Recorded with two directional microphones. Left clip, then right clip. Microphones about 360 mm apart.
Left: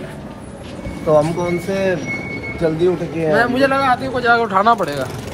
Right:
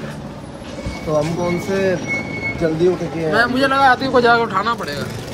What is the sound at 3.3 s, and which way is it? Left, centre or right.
Speech, centre.